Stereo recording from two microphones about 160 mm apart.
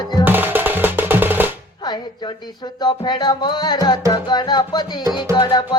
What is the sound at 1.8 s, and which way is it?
Music, 30° left (ahead or behind).